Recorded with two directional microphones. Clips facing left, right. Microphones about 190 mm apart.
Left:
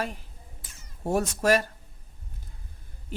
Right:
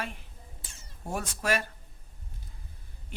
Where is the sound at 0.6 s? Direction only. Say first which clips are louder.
Even; 30° right (ahead or behind).